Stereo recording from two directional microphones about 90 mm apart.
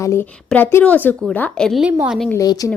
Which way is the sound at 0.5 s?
20° left (ahead or behind).